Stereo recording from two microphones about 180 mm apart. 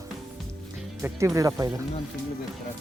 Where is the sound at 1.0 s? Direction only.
15° right (ahead or behind).